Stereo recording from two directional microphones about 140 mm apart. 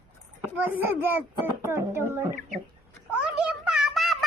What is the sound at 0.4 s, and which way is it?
A child's voice, 15° right (ahead or behind).